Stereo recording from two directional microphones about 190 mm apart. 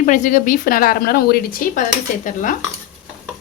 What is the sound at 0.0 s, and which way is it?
A woman's voice, 40° left (ahead or behind).